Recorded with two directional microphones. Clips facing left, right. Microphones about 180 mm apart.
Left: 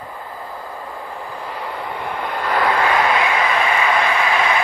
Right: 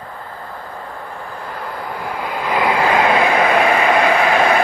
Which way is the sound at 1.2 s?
5° left (ahead or behind).